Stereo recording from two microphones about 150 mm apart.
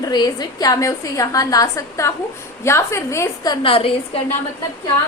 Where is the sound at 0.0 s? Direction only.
25° left (ahead or behind).